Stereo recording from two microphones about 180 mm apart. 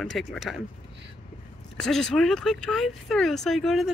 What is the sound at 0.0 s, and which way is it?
Speech, centre (ahead or behind).